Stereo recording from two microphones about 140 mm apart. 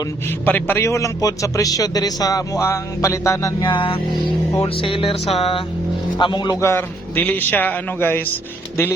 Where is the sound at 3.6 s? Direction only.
35° left (ahead or behind).